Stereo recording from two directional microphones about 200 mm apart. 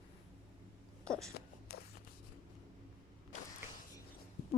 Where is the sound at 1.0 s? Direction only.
5° left (ahead or behind).